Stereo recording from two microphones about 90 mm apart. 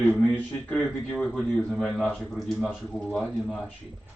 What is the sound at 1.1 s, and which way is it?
Speech, 5° left (ahead or behind).